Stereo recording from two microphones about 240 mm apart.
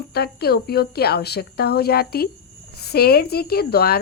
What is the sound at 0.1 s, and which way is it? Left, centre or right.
A woman's voice, left.